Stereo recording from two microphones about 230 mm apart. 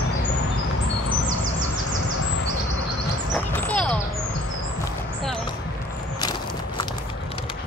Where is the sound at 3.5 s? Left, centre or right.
Centre.